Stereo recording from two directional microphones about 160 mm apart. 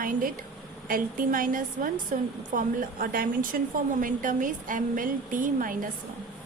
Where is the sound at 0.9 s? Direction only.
60° right (ahead or behind).